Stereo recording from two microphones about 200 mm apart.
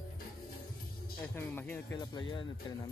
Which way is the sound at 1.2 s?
10° left (ahead or behind).